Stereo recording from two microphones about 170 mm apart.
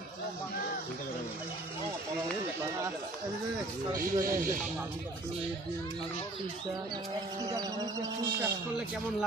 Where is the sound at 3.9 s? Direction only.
15° right (ahead or behind).